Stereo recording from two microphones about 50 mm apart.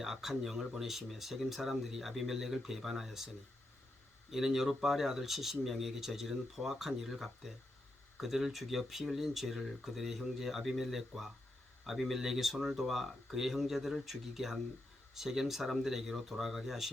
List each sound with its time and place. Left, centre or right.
0.0 s speech: centre